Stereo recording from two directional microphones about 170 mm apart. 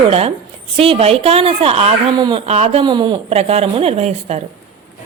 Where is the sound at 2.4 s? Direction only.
40° right (ahead or behind).